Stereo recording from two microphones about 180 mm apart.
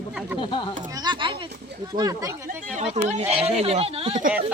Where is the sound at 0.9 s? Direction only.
25° right (ahead or behind).